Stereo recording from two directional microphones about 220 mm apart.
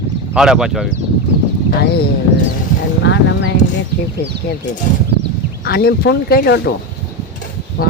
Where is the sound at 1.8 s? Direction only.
45° left (ahead or behind).